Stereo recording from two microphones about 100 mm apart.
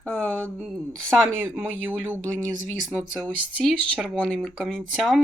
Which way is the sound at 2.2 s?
15° left (ahead or behind).